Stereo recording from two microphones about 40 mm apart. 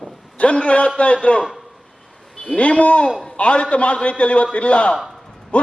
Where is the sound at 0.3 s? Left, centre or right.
Left.